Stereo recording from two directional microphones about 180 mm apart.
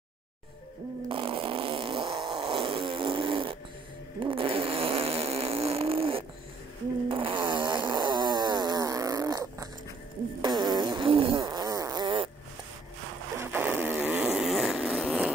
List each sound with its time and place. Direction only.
1.0 s fart: 30° right (ahead or behind)
7.8 s snoring: 25° right (ahead or behind)
10.4 s fart: 25° right (ahead or behind)
13.4 s a sound: 10° right (ahead or behind)